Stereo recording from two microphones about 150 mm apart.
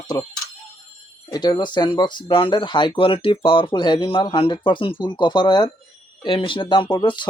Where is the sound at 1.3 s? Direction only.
25° left (ahead or behind).